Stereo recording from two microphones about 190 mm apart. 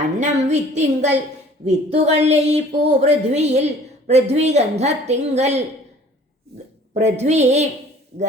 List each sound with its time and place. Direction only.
0.0 s a woman's voice: 35° right (ahead or behind)
6.5 s a sound: 60° right (ahead or behind)
7.0 s a woman's voice: 35° right (ahead or behind)